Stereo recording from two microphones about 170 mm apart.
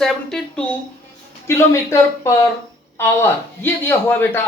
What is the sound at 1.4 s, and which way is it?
A man's voice, 15° left (ahead or behind).